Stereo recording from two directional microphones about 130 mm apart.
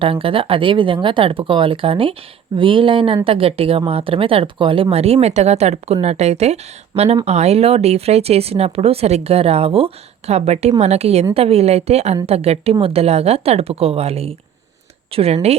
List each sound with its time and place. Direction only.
0.0 s speech: 45° right (ahead or behind)